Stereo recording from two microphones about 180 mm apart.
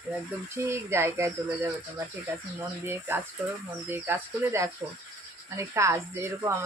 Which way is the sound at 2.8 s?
10° right (ahead or behind).